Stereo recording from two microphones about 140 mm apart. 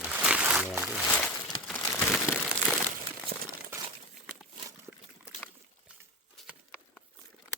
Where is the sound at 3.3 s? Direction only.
80° right.